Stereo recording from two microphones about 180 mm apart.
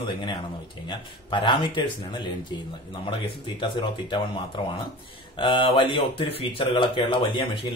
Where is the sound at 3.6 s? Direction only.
25° left (ahead or behind).